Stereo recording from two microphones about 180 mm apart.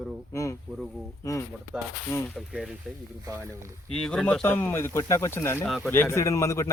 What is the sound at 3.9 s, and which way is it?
Speech, 5° left (ahead or behind).